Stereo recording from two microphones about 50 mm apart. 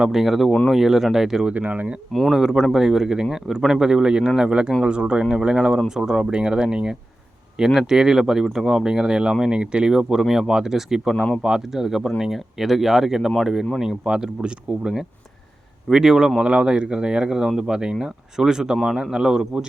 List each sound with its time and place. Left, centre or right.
0.0 s speech: centre
1.5 s speech: right
2.3 s speech: centre